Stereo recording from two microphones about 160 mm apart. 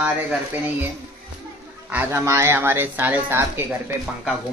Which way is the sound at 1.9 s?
15° right (ahead or behind).